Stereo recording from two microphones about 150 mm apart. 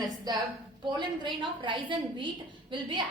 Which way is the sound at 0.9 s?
30° right (ahead or behind).